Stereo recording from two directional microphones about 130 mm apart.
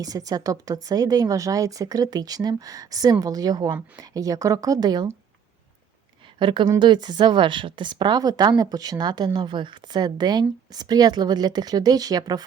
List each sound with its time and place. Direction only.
0.0 s speech: 30° right (ahead or behind)
6.4 s a woman's voice: 40° right (ahead or behind)